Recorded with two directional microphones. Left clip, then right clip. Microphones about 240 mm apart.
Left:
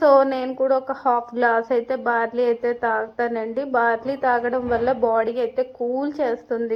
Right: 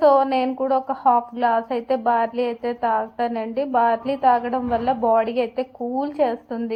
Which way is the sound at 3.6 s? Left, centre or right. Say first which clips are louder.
Right 2 dB; left.